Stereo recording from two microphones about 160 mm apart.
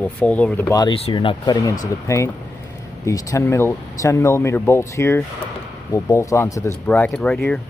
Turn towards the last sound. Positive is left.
turn(degrees=5)  # may be behind; listen again after turning